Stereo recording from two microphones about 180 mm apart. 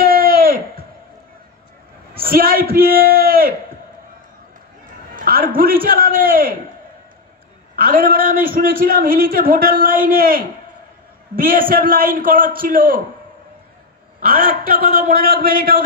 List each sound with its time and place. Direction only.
0.0 s a sound: 55° right (ahead or behind)
2.2 s a man's voice: 55° right (ahead or behind)
5.1 s a man's voice: 50° right (ahead or behind)
7.7 s a man's voice: 55° right (ahead or behind)
14.2 s a man's voice: 50° right (ahead or behind)